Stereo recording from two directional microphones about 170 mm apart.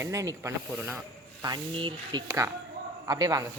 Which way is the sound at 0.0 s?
20° right (ahead or behind).